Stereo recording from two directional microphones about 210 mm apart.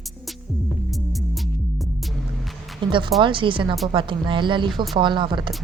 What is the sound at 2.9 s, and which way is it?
Speech, 25° right (ahead or behind).